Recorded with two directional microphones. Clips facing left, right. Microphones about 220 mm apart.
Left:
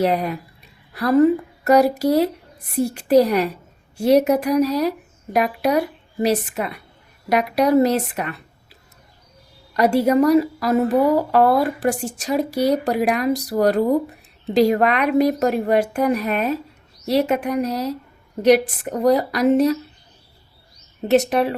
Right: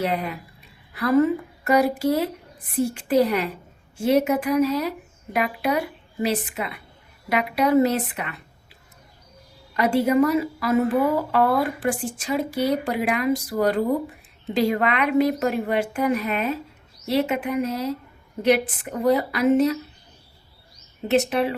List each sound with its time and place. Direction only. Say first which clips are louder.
0.0 s speech: left 6 dB; 40° left (ahead or behind)
9.7 s a woman's voice: left 3 dB; 40° left (ahead or behind)
21.1 s a woman's voice: left 4 dB; 45° left (ahead or behind)